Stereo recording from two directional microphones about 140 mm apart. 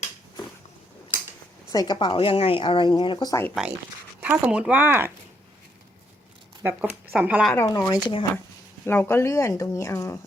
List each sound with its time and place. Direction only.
1.7 s a woman's voice: 30° left (ahead or behind)
4.2 s speech: 10° right (ahead or behind)
6.6 s speech: 15° right (ahead or behind)
7.5 s speech: 15° left (ahead or behind)
7.8 s a woman's voice: 30° left (ahead or behind)
8.9 s speech: 15° left (ahead or behind)